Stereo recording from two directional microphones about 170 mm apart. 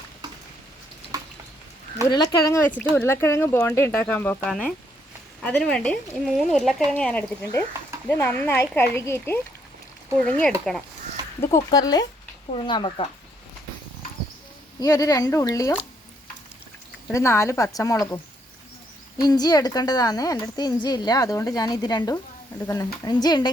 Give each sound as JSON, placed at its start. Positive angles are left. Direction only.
{"t": 2.0, "sound": "speech", "side_deg": 25}
{"t": 10.7, "sound": "speech", "side_deg": 5}
{"t": 11.3, "sound": "speech", "side_deg": 20}
{"t": 14.8, "sound": "speech", "side_deg": 20}
{"t": 17.1, "sound": "speech", "side_deg": 15}